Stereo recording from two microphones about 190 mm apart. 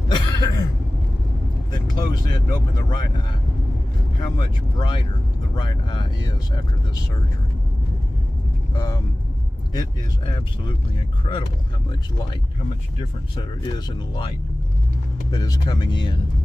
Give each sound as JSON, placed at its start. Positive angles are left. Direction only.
{"t": 0.1, "sound": "cough", "side_deg": 20}
{"t": 1.7, "sound": "speech", "side_deg": 20}
{"t": 4.2, "sound": "speech", "side_deg": 25}
{"t": 8.7, "sound": "speech", "side_deg": 20}
{"t": 13.4, "sound": "speech", "side_deg": 25}
{"t": 15.3, "sound": "speech", "side_deg": 20}